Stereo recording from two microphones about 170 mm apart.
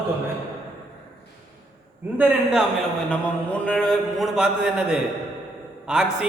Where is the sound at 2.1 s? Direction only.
5° right (ahead or behind).